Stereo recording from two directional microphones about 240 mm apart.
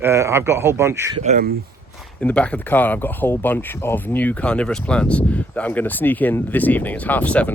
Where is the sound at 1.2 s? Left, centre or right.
Right.